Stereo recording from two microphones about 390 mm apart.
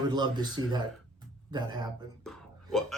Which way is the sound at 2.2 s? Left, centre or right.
Centre.